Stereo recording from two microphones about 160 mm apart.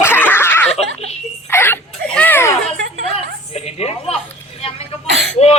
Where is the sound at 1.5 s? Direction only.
15° left (ahead or behind).